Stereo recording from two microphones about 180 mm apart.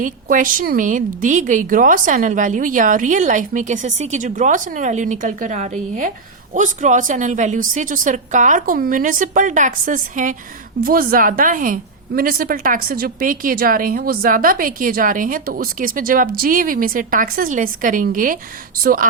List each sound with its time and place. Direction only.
0.0 s a woman's voice: 50° right (ahead or behind)